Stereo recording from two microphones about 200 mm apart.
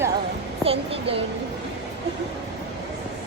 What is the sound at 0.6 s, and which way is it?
Speech, 30° right (ahead or behind).